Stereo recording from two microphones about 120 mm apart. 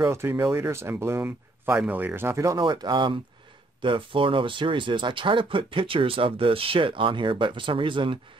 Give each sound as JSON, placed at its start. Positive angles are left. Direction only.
{"t": 0.0, "sound": "speech", "side_deg": -20}
{"t": 2.6, "sound": "speech", "side_deg": -40}